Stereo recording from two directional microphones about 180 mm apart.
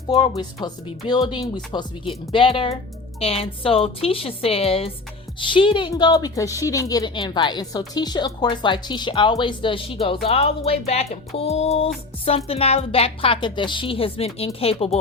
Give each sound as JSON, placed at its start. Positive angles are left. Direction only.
{"t": 0.1, "sound": "a woman's voice", "side_deg": 25}